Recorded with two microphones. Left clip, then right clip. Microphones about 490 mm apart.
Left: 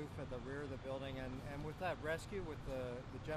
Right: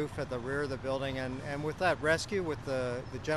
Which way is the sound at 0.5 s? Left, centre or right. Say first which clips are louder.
Right 13 dB; right.